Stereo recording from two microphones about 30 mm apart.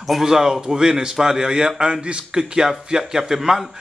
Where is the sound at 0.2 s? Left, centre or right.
Centre.